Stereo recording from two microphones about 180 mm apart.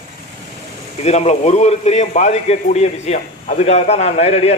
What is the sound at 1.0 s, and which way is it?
A man's voice, 35° left (ahead or behind).